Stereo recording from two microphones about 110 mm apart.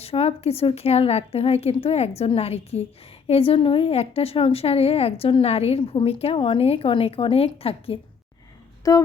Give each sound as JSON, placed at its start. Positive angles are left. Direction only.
{"t": 0.0, "sound": "a woman's voice", "side_deg": 65}
{"t": 8.8, "sound": "speech", "side_deg": 30}